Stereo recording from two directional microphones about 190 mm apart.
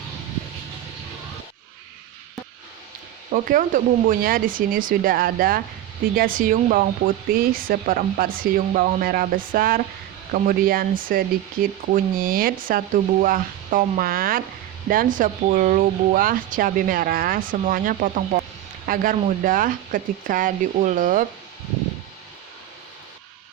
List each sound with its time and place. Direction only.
3.3 s speech: 45° right (ahead or behind)